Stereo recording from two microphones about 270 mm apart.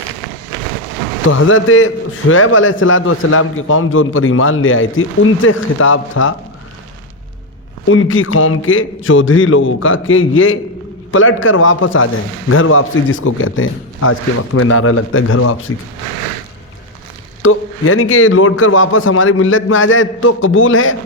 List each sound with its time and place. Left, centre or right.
1.3 s a man's voice: left
7.9 s a man's voice: left
17.4 s a man's voice: left